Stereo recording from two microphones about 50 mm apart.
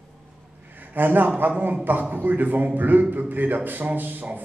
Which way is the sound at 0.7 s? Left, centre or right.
Right.